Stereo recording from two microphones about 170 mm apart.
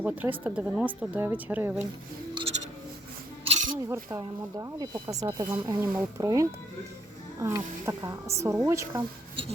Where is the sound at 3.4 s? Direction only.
35° right (ahead or behind).